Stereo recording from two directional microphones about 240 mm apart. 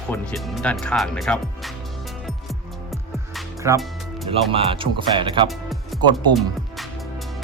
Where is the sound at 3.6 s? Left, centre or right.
Centre.